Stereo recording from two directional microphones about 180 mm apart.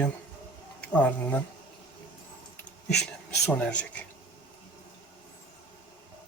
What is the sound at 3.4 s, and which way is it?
Speech, 10° left (ahead or behind).